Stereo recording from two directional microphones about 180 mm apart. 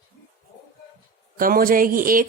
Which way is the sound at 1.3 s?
55° right (ahead or behind).